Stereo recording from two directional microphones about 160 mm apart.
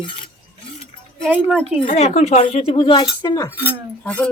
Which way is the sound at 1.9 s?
45° left (ahead or behind).